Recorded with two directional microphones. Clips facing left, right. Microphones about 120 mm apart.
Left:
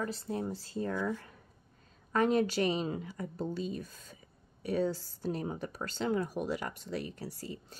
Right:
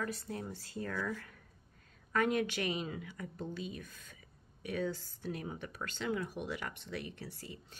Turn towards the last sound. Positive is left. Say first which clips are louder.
# left 6 dB
turn(degrees=35)  # may be behind; listen again after turning